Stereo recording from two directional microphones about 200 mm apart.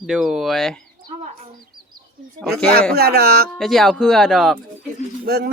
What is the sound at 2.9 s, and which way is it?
Speech, 50° right (ahead or behind).